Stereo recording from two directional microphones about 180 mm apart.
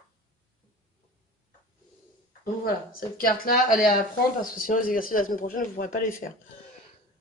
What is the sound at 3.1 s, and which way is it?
A woman's voice, 50° left (ahead or behind).